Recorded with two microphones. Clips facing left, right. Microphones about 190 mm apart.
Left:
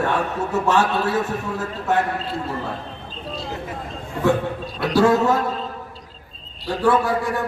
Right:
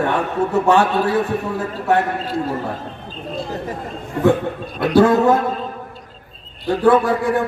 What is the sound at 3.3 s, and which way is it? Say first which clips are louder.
Speech: right 4 dB; 50° right (ahead or behind).